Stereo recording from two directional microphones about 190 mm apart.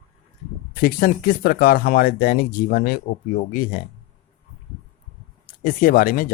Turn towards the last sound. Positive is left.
turn(degrees=50)  # may be behind; listen again after turning